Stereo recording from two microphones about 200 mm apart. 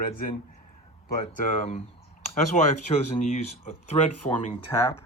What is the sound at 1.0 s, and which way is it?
Speech, 40° left (ahead or behind).